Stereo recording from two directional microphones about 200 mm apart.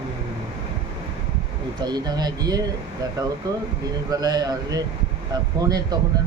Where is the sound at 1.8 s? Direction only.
20° right (ahead or behind).